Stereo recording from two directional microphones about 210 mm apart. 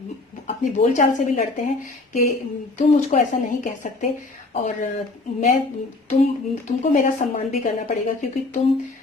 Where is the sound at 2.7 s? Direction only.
35° left (ahead or behind).